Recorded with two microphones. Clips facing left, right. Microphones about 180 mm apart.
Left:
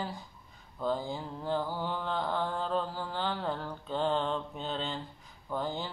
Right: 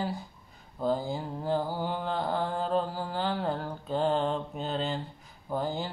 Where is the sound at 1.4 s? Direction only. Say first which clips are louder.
Right 3 dB; 40° right (ahead or behind).